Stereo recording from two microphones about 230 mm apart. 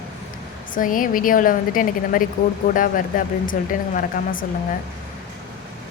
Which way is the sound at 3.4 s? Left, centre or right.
Left.